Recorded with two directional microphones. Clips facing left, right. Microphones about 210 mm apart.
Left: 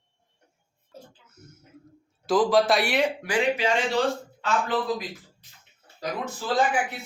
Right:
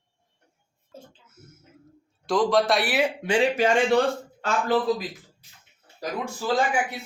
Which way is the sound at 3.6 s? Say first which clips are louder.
Right 5 dB; 50° right (ahead or behind).